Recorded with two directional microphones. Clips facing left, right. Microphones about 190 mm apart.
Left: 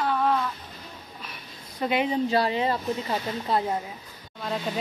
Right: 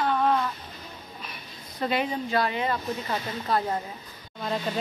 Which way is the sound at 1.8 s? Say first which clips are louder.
Left 2 dB; 15° left (ahead or behind).